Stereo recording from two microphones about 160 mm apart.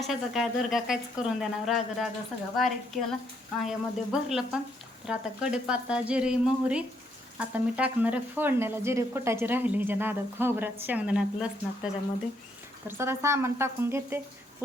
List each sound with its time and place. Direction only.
0.0 s a woman's voice: centre (ahead or behind)
12.9 s speech: 15° right (ahead or behind)